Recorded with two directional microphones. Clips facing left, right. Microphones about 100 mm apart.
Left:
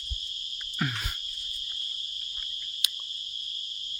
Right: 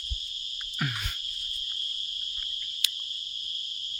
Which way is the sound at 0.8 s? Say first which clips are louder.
Left 2 dB; 5° right (ahead or behind).